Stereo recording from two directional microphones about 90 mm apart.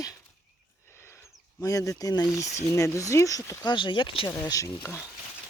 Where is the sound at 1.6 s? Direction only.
40° left (ahead or behind).